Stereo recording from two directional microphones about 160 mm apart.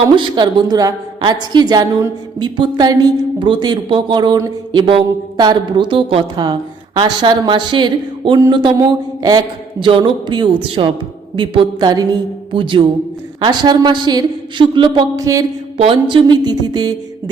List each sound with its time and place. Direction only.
0.2 s a woman's voice: 25° right (ahead or behind)
15.8 s a woman's voice: 35° right (ahead or behind)